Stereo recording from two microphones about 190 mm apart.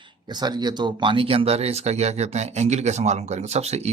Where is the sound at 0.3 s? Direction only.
20° right (ahead or behind).